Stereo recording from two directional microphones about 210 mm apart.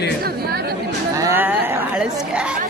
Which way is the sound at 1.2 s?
10° right (ahead or behind).